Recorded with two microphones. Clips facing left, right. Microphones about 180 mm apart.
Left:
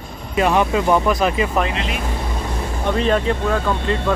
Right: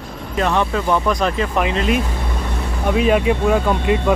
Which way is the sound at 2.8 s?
10° right (ahead or behind).